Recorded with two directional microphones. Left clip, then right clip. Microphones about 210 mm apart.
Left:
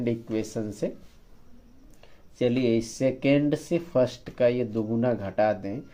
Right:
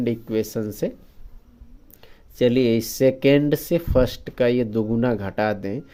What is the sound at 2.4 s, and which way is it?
Speech, 55° right (ahead or behind).